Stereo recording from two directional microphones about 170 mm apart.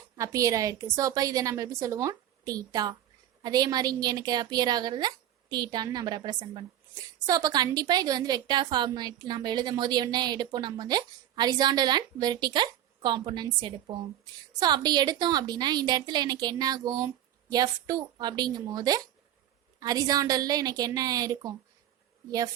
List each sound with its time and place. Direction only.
0.2 s a woman's voice: 20° right (ahead or behind)